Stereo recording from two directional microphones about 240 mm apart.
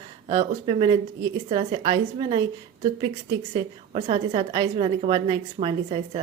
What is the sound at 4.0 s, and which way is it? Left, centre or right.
A woman's voice, right.